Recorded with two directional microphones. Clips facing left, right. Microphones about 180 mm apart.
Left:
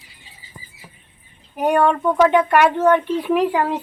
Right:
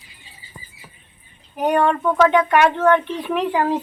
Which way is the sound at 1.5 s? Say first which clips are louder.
Left 1 dB; 10° left (ahead or behind).